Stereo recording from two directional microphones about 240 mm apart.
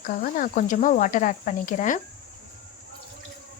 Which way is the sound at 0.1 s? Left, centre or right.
Left.